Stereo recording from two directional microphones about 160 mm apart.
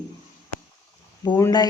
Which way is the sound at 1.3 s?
25° left (ahead or behind).